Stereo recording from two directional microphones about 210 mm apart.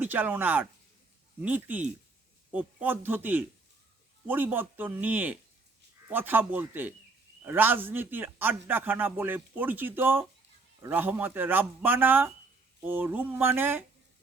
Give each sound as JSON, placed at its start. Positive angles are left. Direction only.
{"t": 0.0, "sound": "a man's voice", "side_deg": -10}